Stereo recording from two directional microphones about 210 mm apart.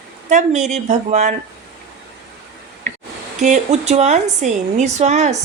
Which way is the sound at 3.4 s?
35° right (ahead or behind).